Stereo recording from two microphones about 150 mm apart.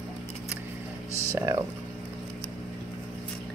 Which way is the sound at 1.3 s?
20° right (ahead or behind).